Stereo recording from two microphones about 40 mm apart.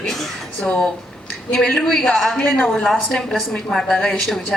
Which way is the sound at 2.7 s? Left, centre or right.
Centre.